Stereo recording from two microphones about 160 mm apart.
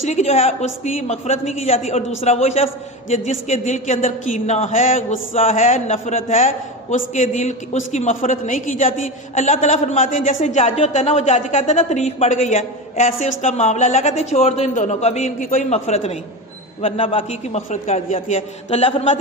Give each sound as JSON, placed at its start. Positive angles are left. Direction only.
{"t": 0.0, "sound": "a woman's voice", "side_deg": 40}
{"t": 5.3, "sound": "a woman's voice", "side_deg": 40}
{"t": 15.7, "sound": "a woman's voice", "side_deg": 40}